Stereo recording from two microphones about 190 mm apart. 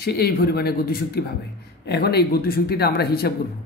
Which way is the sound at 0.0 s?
55° left (ahead or behind).